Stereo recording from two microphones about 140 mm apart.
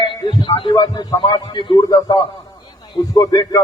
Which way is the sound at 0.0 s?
35° left (ahead or behind).